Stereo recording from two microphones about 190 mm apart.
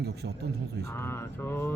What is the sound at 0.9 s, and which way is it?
Speech, 15° left (ahead or behind).